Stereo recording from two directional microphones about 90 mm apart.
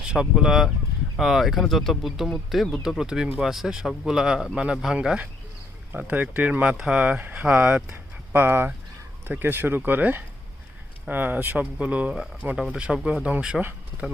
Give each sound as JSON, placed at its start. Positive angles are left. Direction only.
{"t": 0.1, "sound": "speech", "side_deg": -10}
{"t": 7.9, "sound": "a sound", "side_deg": -25}
{"t": 9.2, "sound": "speech", "side_deg": -20}